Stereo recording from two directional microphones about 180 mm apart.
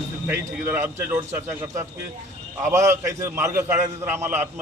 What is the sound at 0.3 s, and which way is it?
A man's voice, 10° right (ahead or behind).